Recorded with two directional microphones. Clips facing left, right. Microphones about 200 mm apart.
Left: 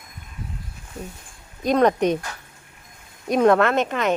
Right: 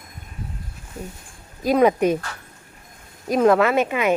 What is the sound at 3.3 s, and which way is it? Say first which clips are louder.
Speech: even; centre (ahead or behind).